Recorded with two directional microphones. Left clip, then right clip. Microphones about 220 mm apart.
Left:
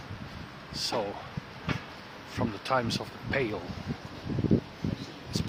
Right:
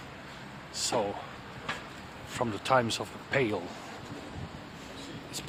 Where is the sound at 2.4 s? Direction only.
15° right (ahead or behind).